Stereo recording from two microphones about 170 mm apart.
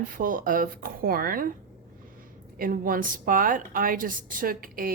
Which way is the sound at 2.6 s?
55° right (ahead or behind).